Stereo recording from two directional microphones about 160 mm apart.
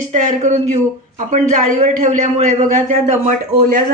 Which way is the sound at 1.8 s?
50° right (ahead or behind).